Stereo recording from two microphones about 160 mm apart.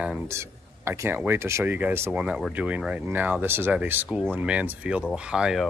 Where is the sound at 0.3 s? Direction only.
15° right (ahead or behind).